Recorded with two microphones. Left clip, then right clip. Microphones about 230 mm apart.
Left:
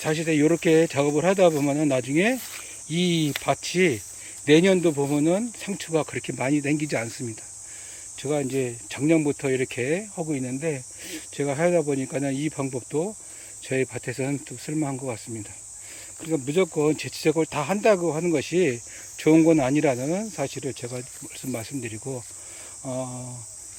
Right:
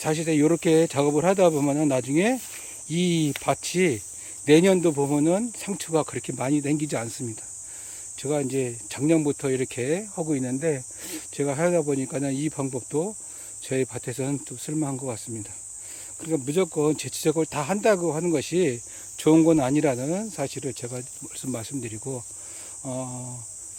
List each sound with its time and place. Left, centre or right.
0.0 s speech: centre
16.2 s speech: centre